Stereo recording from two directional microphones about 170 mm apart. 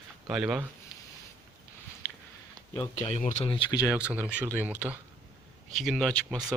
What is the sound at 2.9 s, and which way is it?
Speech, 40° left (ahead or behind).